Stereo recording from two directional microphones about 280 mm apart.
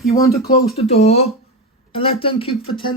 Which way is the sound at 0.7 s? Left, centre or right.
Left.